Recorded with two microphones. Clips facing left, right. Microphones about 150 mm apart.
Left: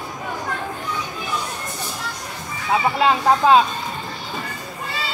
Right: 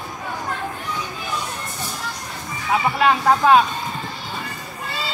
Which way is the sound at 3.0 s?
25° left (ahead or behind).